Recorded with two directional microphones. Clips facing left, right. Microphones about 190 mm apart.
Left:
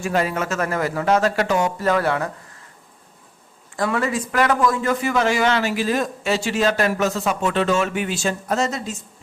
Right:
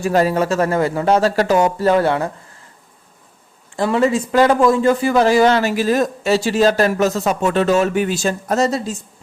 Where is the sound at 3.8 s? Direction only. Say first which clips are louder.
Right 6 dB; 25° right (ahead or behind).